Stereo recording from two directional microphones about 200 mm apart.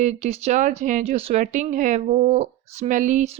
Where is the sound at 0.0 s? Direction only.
35° right (ahead or behind).